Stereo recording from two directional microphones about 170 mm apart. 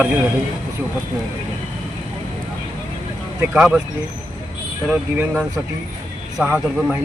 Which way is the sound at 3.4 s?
5° right (ahead or behind).